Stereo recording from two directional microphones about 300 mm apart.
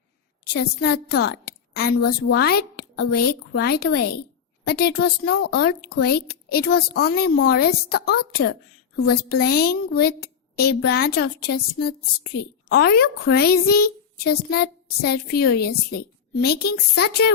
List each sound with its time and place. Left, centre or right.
0.5 s a woman's voice: left